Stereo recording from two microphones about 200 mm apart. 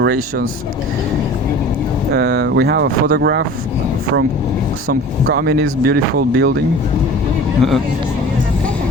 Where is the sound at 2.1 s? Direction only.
55° right (ahead or behind).